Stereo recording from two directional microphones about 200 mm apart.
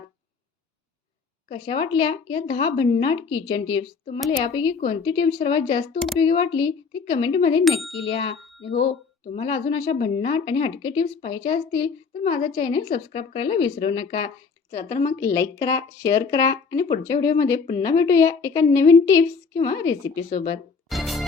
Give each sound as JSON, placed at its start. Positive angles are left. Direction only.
{"t": 1.5, "sound": "speech", "side_deg": 25}
{"t": 20.9, "sound": "music", "side_deg": 0}